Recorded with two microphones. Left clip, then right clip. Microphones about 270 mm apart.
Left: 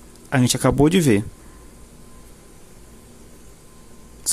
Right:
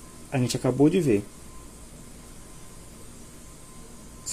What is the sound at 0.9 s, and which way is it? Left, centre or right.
Speech, left.